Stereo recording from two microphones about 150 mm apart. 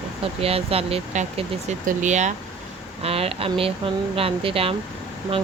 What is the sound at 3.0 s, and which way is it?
Speech, 40° right (ahead or behind).